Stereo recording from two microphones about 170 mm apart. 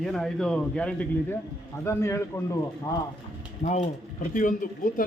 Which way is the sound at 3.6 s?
40° left (ahead or behind).